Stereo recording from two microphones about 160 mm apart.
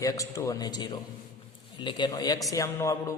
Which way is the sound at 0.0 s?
20° left (ahead or behind).